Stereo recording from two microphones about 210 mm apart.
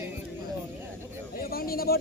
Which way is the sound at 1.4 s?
45° left (ahead or behind).